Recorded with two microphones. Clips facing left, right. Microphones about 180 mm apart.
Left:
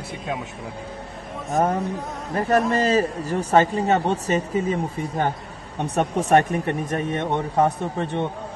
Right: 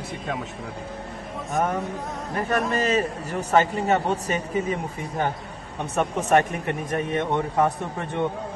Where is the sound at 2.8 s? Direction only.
35° left (ahead or behind).